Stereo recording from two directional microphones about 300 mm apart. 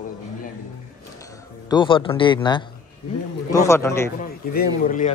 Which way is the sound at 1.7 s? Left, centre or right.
Centre.